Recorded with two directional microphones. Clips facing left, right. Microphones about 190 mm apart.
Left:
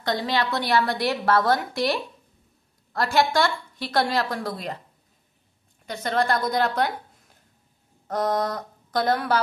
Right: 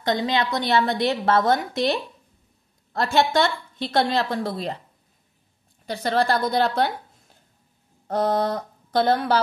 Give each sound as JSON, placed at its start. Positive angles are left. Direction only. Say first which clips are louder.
{"t": 0.0, "sound": "a woman's voice", "louder": "right 2 dB", "side_deg": -20}
{"t": 5.9, "sound": "a woman's voice", "louder": "right 2 dB", "side_deg": -35}